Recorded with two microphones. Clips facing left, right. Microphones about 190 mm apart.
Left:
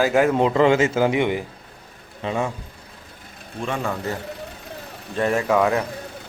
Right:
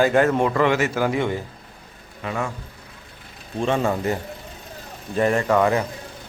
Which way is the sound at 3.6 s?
30° right (ahead or behind).